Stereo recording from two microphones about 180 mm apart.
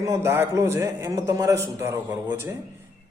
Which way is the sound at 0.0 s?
15° right (ahead or behind).